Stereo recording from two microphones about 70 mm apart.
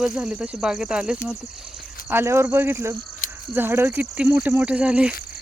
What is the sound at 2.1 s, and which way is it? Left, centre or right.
Speech, right.